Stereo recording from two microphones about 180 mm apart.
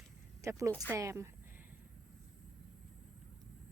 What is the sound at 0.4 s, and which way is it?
Speech, 15° right (ahead or behind).